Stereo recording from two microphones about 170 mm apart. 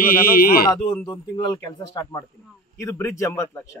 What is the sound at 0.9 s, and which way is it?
Speech, 25° left (ahead or behind).